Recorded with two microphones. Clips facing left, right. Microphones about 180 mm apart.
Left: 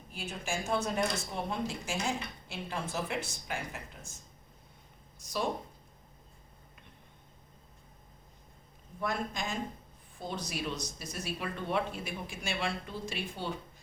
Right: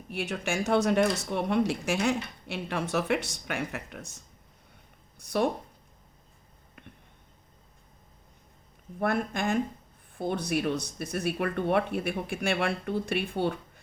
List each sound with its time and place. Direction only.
0.1 s speech: 70° right (ahead or behind)
5.2 s speech: 60° right (ahead or behind)
9.0 s speech: 60° right (ahead or behind)